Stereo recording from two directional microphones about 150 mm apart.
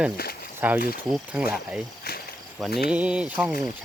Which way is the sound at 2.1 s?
90° left.